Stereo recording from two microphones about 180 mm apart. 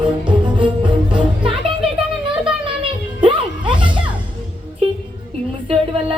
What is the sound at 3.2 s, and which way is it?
Music, 25° right (ahead or behind).